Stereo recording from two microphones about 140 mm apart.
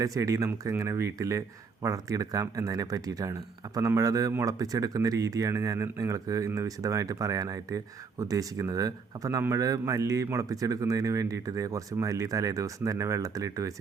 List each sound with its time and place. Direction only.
0.0 s speech: 25° right (ahead or behind)